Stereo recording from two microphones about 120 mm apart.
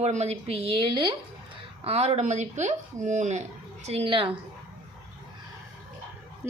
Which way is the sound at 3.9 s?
55° right (ahead or behind).